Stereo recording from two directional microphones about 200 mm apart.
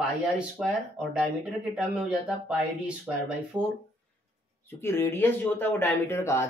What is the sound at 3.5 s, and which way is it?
Speech, 20° right (ahead or behind).